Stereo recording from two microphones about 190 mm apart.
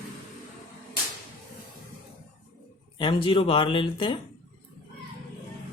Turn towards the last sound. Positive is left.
turn(degrees=25)  # may be behind; listen again after turning